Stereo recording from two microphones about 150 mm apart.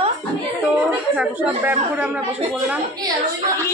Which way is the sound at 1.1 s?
10° right (ahead or behind).